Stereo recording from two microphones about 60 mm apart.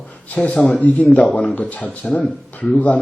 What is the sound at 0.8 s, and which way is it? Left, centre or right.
Speech, left.